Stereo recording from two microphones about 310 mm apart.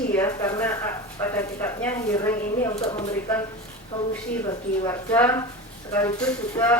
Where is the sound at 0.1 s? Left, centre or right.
Centre.